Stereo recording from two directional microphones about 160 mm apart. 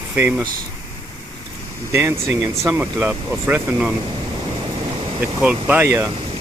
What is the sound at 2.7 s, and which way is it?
Speech, 10° right (ahead or behind).